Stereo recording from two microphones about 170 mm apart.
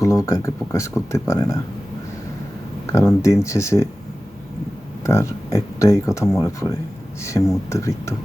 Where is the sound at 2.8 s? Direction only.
15° left (ahead or behind).